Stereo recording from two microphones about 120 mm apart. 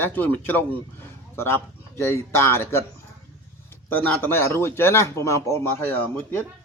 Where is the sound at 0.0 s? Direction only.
15° left (ahead or behind).